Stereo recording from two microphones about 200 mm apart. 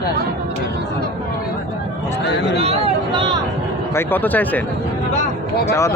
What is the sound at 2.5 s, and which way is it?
Speech, 30° right (ahead or behind).